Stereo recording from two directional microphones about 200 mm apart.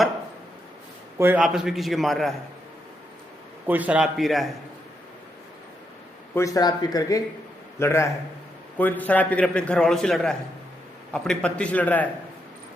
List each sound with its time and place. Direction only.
1.2 s a man's voice: 5° right (ahead or behind)
3.7 s a man's voice: 5° right (ahead or behind)
6.3 s a man's voice: 15° left (ahead or behind)